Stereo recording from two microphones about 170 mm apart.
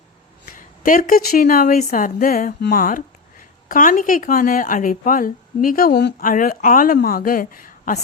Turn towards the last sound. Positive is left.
turn(degrees=50)  # may be behind; listen again after turning